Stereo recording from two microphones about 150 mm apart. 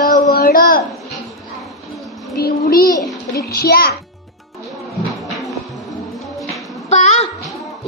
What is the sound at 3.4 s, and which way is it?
Speech, 90° left.